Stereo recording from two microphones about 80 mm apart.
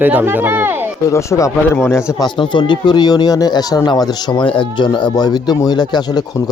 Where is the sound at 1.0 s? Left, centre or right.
Left.